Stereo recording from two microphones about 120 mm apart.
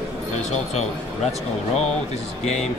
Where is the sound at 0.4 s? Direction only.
70° left (ahead or behind).